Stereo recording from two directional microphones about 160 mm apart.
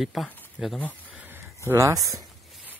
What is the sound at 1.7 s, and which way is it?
Speech, 20° right (ahead or behind).